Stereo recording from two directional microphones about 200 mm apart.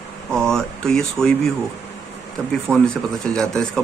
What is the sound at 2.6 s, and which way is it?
Speech, 5° left (ahead or behind).